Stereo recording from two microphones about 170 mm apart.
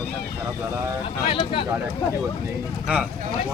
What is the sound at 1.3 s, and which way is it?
Speech, 35° left (ahead or behind).